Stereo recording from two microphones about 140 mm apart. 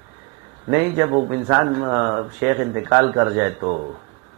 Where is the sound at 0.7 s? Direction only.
20° right (ahead or behind).